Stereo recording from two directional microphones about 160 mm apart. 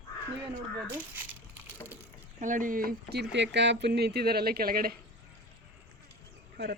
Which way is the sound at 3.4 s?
90° right.